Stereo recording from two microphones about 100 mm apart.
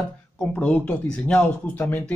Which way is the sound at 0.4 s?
15° left (ahead or behind).